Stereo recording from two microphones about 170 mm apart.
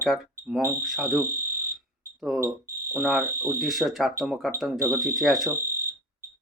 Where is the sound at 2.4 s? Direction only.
15° right (ahead or behind).